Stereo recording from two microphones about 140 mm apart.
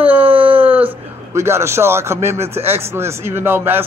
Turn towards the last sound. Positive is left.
turn(degrees=-15)  # may be behind; listen again after turning